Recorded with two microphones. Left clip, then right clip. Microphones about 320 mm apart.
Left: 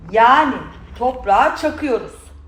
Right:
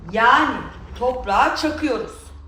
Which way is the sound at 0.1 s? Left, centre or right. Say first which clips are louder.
Left 4 dB; centre.